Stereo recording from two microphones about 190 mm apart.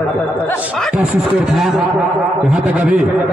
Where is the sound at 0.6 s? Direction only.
5° right (ahead or behind).